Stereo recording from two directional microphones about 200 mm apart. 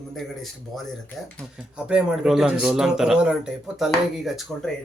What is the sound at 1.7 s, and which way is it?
A man's voice, 5° right (ahead or behind).